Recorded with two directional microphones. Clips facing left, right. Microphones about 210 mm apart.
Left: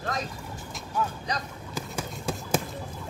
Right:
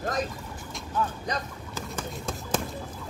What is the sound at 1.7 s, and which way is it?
Run, 10° left (ahead or behind).